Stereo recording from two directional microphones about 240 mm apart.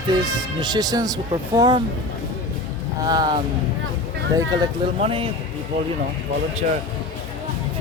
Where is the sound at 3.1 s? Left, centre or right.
Centre.